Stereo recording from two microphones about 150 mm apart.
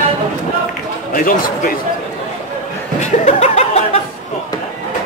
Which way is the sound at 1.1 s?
70° left (ahead or behind).